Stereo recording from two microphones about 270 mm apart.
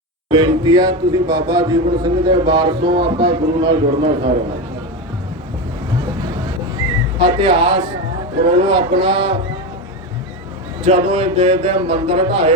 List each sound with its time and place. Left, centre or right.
0.3 s speech: centre
7.2 s speech: centre
10.8 s speech: centre